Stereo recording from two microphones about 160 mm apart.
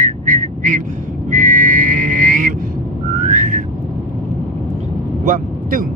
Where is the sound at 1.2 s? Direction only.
55° right (ahead or behind).